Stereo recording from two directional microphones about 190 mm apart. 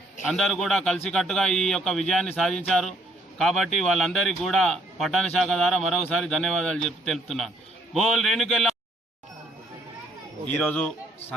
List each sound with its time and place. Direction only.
0.3 s a man's voice: centre (ahead or behind)
10.6 s a man's voice: 5° left (ahead or behind)